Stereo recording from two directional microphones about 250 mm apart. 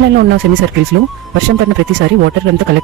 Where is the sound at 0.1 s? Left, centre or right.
Right.